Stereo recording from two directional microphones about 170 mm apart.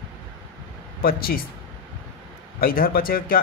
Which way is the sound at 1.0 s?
60° left (ahead or behind).